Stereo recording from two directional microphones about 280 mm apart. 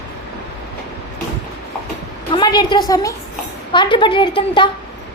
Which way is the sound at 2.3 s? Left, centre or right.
Centre.